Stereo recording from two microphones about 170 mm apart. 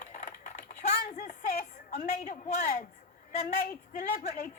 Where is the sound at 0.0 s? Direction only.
45° left (ahead or behind).